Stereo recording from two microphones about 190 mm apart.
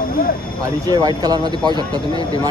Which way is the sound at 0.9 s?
20° right (ahead or behind).